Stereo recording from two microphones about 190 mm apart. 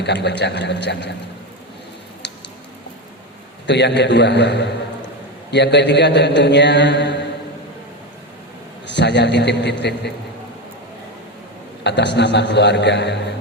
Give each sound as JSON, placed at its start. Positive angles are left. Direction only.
{"t": 0.0, "sound": "a man's voice", "side_deg": 65}
{"t": 2.2, "sound": "a sound", "side_deg": 65}
{"t": 3.7, "sound": "a man's voice", "side_deg": 65}
{"t": 8.9, "sound": "a man's voice", "side_deg": 65}
{"t": 11.8, "sound": "a man's voice", "side_deg": 65}